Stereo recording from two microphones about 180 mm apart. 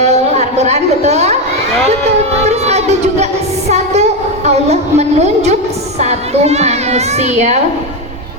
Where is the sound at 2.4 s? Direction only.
35° right (ahead or behind).